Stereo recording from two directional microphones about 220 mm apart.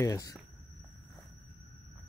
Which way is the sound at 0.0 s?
15° left (ahead or behind).